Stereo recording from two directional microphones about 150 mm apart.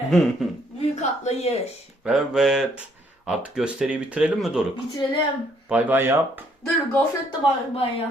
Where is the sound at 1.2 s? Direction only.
45° left (ahead or behind).